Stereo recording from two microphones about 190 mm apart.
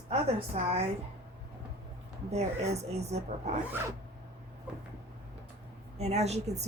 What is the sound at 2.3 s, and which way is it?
Speech, 35° right (ahead or behind).